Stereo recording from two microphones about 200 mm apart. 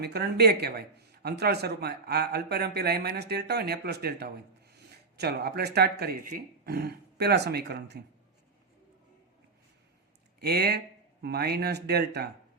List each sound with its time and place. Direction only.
0.0 s speech: 55° right (ahead or behind)
10.4 s speech: 50° right (ahead or behind)